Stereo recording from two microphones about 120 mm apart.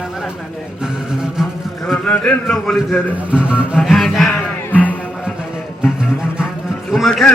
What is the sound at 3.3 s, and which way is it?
Speech, 10° right (ahead or behind).